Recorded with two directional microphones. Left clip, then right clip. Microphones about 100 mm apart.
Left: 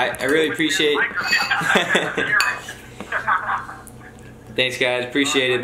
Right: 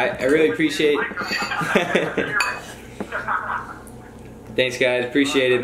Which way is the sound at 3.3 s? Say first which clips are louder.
Left 4 dB; 20° left (ahead or behind).